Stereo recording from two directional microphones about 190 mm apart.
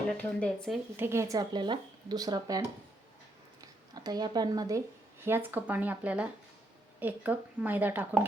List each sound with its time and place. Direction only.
0.1 s speech: 5° left (ahead or behind)
0.9 s speech: 15° right (ahead or behind)
3.6 s a woman's voice: 20° right (ahead or behind)